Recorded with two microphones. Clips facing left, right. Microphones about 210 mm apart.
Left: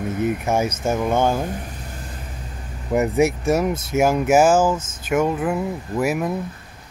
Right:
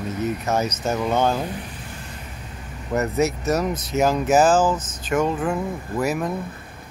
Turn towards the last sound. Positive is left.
turn(degrees=5)  # may be behind; listen again after turning